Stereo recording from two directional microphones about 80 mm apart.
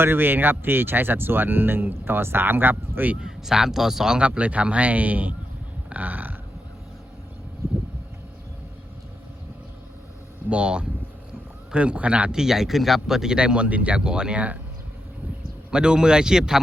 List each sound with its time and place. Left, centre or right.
0.0 s speech: right
3.2 s a man's voice: centre
5.9 s burping: right
10.5 s a man's voice: centre
15.7 s a man's voice: centre